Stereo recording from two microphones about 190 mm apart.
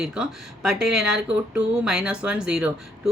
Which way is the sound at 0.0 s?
5° right (ahead or behind).